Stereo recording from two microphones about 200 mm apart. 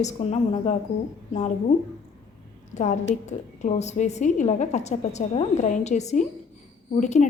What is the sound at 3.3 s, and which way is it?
A woman's voice, 35° left (ahead or behind).